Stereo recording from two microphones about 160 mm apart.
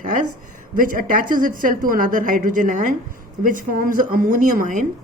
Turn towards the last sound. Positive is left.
turn(degrees=-55)  # may be behind; listen again after turning